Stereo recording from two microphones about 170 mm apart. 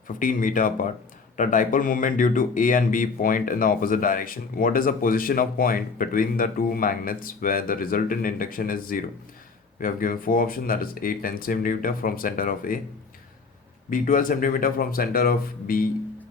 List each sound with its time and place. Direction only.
0.1 s speech: 50° left (ahead or behind)
13.9 s speech: 50° left (ahead or behind)